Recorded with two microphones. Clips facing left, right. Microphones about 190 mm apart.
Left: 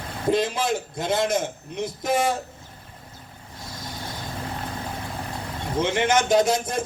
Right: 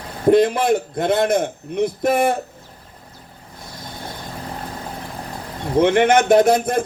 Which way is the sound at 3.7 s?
60° right (ahead or behind).